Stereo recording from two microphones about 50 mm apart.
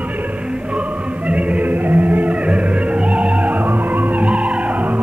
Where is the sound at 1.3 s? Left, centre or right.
Right.